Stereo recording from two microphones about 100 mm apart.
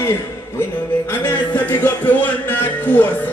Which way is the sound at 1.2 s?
20° left (ahead or behind).